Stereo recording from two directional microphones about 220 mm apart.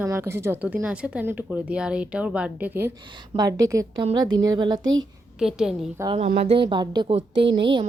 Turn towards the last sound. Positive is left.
turn(degrees=-20)  # may be behind; listen again after turning